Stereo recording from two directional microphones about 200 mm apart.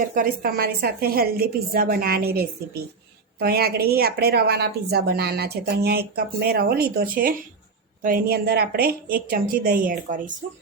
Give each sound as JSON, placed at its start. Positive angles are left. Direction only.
{"t": 0.1, "sound": "a woman's voice", "side_deg": -45}